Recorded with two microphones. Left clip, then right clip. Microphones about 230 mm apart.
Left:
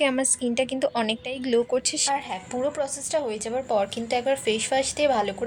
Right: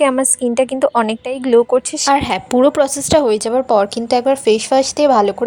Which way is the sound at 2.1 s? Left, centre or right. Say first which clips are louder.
Right 14 dB; right.